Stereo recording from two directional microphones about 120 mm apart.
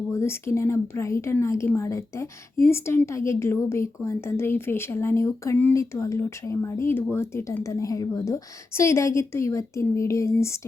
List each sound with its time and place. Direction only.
0.1 s speech: 20° left (ahead or behind)